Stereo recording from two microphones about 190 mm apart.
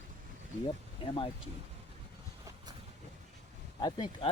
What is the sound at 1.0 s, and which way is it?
Speech, 30° left (ahead or behind).